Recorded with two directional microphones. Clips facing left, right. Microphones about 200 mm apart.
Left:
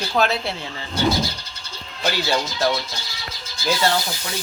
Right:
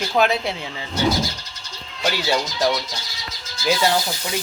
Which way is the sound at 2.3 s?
5° right (ahead or behind).